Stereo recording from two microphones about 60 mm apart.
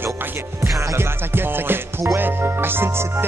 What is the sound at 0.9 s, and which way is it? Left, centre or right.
Music, right.